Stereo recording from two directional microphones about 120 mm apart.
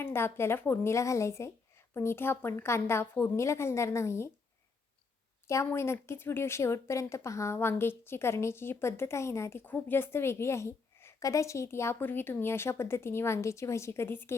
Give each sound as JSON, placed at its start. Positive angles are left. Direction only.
{"t": 0.0, "sound": "a woman's voice", "side_deg": 20}
{"t": 5.5, "sound": "a woman's voice", "side_deg": 25}